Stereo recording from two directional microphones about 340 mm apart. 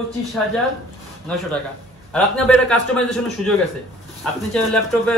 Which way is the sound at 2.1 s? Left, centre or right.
Centre.